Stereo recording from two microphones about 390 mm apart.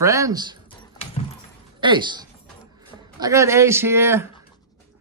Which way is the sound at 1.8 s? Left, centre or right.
Centre.